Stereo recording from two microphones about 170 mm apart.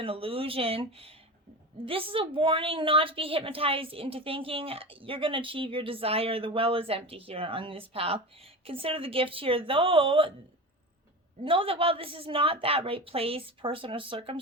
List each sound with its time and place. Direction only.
0.0 s a woman's voice: 35° right (ahead or behind)
11.4 s a woman's voice: 35° right (ahead or behind)